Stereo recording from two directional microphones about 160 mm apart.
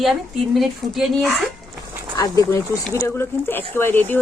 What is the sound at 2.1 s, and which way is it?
Speech, 20° left (ahead or behind).